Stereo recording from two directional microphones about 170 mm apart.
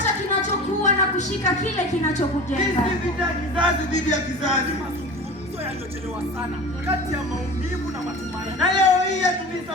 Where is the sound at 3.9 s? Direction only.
45° left (ahead or behind).